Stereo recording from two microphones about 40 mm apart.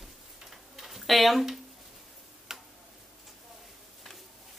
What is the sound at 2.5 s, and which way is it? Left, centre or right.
Tick-tock, centre.